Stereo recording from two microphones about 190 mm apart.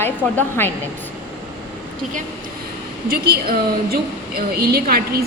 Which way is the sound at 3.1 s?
55° right (ahead or behind).